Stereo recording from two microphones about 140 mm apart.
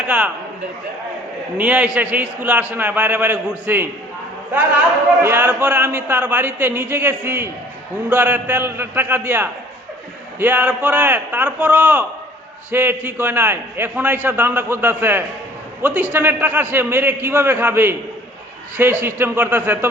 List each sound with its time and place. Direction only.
1.5 s a man's voice: 10° right (ahead or behind)